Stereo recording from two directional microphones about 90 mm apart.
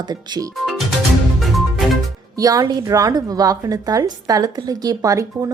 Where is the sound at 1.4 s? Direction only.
Centre (ahead or behind).